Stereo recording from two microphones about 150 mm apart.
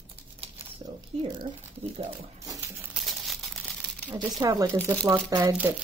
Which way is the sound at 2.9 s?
Centre (ahead or behind).